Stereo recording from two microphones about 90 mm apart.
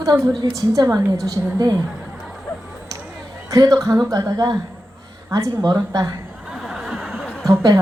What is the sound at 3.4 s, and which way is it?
Speech, 40° right (ahead or behind).